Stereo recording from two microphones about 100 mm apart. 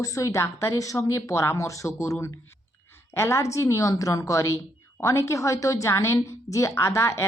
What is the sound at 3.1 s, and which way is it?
A woman's voice, 25° left (ahead or behind).